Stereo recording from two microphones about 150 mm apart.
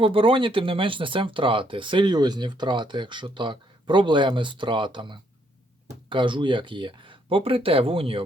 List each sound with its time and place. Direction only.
0.0 s speech: 35° right (ahead or behind)